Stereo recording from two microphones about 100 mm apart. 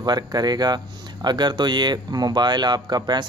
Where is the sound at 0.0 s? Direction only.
45° right (ahead or behind).